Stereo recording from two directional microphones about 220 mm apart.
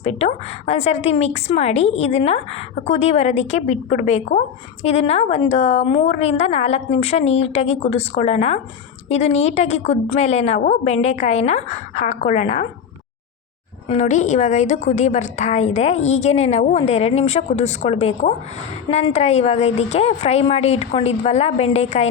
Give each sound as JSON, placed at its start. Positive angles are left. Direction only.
{"t": 0.0, "sound": "a woman's voice", "side_deg": 30}
{"t": 13.8, "sound": "a woman's voice", "side_deg": 30}